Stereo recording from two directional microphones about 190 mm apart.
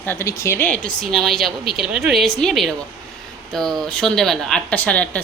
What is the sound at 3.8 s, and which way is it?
A woman's voice, 5° left (ahead or behind).